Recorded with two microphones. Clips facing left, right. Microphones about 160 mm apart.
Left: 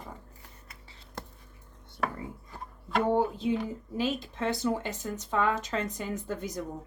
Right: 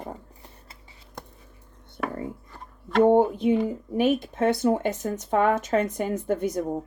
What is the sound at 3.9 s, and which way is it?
A woman's voice, 65° right (ahead or behind).